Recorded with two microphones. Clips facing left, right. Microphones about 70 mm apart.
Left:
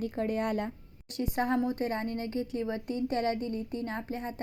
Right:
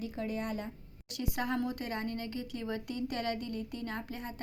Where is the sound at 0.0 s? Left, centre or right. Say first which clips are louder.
Left 6 dB; left.